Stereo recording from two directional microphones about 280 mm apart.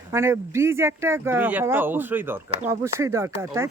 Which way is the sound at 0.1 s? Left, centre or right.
Centre.